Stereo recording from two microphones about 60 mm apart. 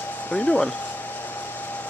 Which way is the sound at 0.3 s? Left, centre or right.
Centre.